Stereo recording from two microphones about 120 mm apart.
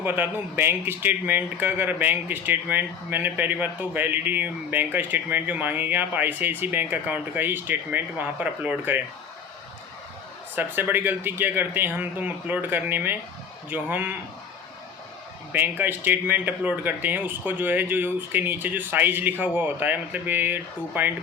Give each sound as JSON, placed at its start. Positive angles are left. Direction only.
{"t": 0.0, "sound": "speech", "side_deg": -15}
{"t": 10.5, "sound": "speech", "side_deg": -15}
{"t": 15.5, "sound": "speech", "side_deg": -15}